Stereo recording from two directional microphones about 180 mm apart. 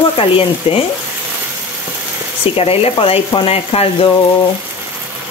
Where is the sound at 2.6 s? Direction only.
35° left (ahead or behind).